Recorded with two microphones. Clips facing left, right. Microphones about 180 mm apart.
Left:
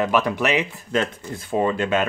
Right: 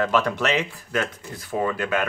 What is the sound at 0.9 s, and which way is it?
Speech, 25° left (ahead or behind).